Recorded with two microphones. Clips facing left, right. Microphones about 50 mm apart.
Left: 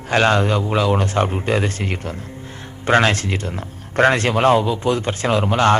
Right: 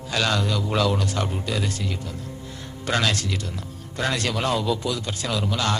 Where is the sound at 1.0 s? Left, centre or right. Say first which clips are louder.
Left 7 dB; left.